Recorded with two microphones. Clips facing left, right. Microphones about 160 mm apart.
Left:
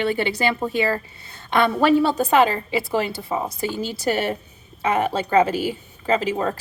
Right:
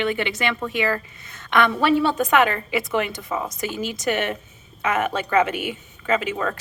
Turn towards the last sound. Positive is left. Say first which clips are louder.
# left 2 dB
turn(degrees=30)  # may be behind; listen again after turning